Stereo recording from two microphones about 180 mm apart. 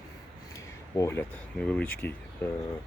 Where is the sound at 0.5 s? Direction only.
15° left (ahead or behind).